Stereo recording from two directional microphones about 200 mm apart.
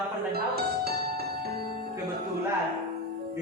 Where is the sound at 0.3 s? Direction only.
50° right (ahead or behind).